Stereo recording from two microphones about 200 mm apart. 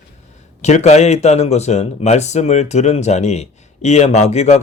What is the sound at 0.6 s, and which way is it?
A man's voice, 35° left (ahead or behind).